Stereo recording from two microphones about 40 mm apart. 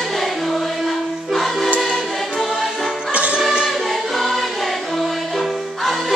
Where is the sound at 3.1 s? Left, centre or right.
Right.